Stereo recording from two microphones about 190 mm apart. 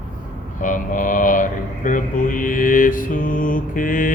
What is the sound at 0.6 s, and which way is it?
Mantra, 45° left (ahead or behind).